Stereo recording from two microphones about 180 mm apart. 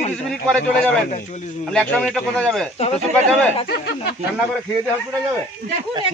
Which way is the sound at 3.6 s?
65° left (ahead or behind).